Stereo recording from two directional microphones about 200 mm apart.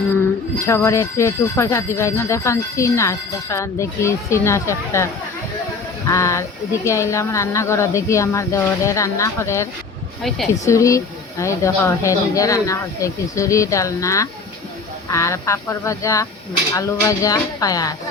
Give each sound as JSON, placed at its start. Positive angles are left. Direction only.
{"t": 0.6, "sound": "speech", "side_deg": 15}
{"t": 6.1, "sound": "speech", "side_deg": 15}
{"t": 10.7, "sound": "speech", "side_deg": 15}